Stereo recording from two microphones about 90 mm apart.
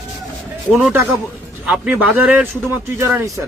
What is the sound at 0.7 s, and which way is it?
Speech, centre (ahead or behind).